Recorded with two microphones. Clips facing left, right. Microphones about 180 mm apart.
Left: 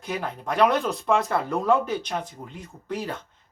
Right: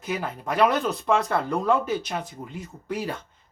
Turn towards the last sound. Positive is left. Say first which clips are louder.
# right 1 dB
turn(degrees=-10)  # may be behind; listen again after turning